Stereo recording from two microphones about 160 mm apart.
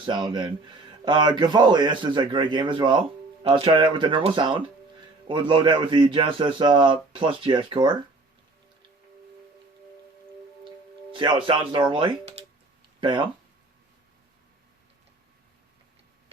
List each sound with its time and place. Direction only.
0.0 s a man's voice: 30° right (ahead or behind)
11.1 s a man's voice: 30° right (ahead or behind)